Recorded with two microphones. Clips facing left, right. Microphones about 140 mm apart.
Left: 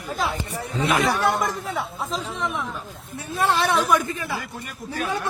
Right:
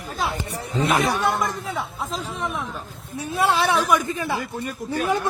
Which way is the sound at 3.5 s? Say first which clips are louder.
Even; centre (ahead or behind).